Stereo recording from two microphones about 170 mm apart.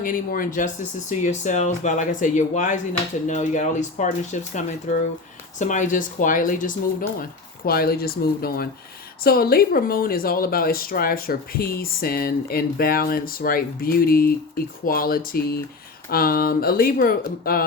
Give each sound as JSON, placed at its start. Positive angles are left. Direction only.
{"t": 0.0, "sound": "speech", "side_deg": 55}